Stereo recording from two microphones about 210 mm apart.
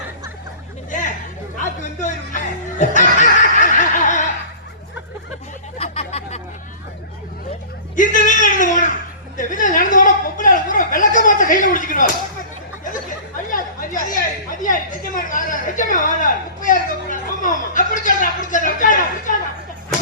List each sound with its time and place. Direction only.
1.5 s music: 35° left (ahead or behind)
5.8 s hubbub: 30° left (ahead or behind)
7.9 s a sound: 40° left (ahead or behind)
9.4 s chuckle: 40° left (ahead or behind)
12.8 s chatter: 40° left (ahead or behind)